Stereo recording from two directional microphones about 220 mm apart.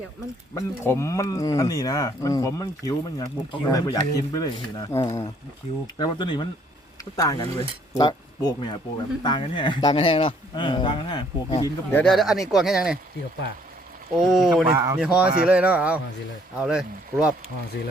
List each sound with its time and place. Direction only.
0.5 s speech: 15° left (ahead or behind); by 5.8 s 30° left (ahead or behind)
6.0 s speech: 20° left (ahead or behind); by 13.0 s centre (ahead or behind)
14.3 s speech: centre (ahead or behind)
17.7 s speech: 50° left (ahead or behind)